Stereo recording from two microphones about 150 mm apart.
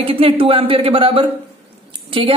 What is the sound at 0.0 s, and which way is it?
Speech, 35° right (ahead or behind).